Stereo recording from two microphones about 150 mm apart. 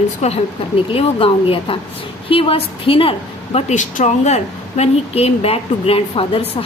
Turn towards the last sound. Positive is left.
turn(degrees=40)  # may be behind; listen again after turning